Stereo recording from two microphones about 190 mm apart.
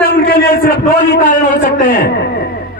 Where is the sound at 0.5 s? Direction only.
50° left (ahead or behind).